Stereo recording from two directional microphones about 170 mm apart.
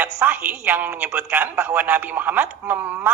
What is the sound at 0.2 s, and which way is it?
A man's voice, 10° right (ahead or behind).